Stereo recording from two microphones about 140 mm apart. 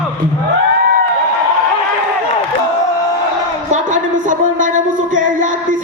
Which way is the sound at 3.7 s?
65° right (ahead or behind).